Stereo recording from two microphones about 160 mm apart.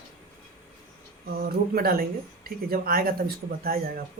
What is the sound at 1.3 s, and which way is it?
Speech, 70° right (ahead or behind).